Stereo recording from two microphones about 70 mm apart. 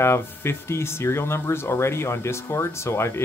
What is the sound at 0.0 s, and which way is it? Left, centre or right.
Speech, left.